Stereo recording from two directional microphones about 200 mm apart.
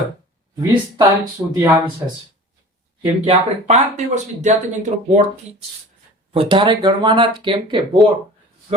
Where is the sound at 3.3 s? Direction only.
35° right (ahead or behind).